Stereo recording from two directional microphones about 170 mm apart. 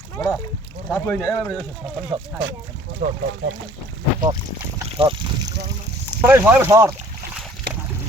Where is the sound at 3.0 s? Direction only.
45° right (ahead or behind).